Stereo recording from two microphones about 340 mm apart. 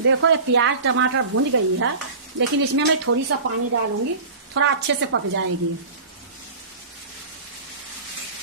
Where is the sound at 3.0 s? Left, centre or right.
Right.